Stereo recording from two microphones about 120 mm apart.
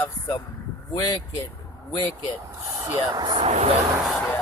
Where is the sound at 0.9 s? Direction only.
35° left (ahead or behind).